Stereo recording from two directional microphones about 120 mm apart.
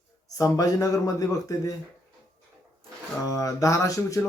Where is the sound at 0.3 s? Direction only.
30° left (ahead or behind).